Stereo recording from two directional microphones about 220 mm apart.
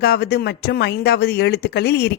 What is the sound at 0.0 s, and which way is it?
A woman's voice, 45° left (ahead or behind).